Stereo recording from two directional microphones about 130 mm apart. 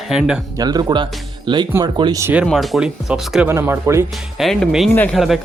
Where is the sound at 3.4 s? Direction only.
15° right (ahead or behind).